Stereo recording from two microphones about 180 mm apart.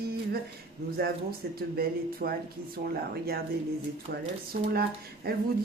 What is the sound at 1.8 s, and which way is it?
Speech, 55° right (ahead or behind).